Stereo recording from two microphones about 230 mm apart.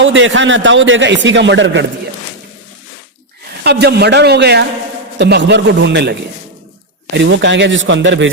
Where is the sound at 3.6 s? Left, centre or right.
Right.